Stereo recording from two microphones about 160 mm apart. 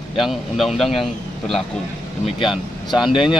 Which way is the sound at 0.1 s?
Centre (ahead or behind).